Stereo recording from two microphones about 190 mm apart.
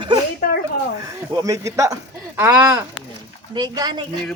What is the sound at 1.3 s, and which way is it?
A man's voice, 20° right (ahead or behind).